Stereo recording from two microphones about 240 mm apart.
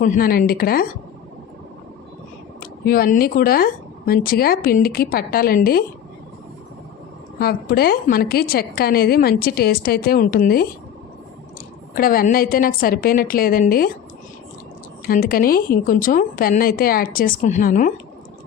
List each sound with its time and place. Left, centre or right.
0.0 s a woman's voice: left
2.6 s a woman's voice: left
7.3 s a woman's voice: left
11.9 s a woman's voice: left
15.0 s a woman's voice: left